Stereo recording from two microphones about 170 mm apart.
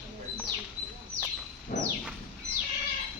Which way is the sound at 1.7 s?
50° left (ahead or behind).